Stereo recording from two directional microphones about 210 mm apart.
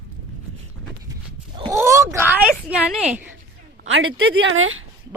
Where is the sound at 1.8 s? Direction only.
15° right (ahead or behind).